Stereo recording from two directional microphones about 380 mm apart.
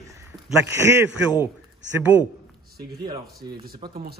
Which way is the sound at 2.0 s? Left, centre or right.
Centre.